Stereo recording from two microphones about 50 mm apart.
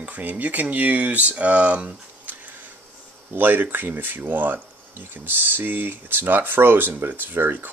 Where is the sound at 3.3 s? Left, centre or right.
Right.